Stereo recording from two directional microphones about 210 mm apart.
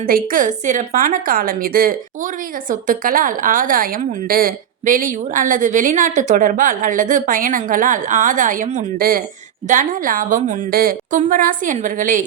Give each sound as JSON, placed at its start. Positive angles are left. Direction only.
{"t": 0.0, "sound": "a woman's voice", "side_deg": -40}